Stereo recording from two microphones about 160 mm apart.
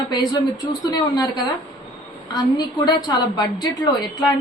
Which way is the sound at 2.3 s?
25° left (ahead or behind).